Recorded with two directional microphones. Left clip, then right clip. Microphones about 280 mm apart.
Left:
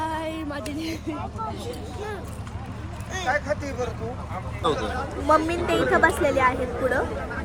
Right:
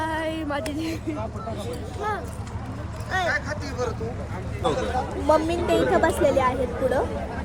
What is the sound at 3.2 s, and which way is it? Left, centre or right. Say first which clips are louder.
Speech: left 1 dB; centre.